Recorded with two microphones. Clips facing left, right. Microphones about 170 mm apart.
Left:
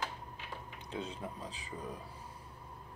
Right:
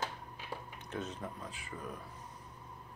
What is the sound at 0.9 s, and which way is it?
Speech, 15° left (ahead or behind).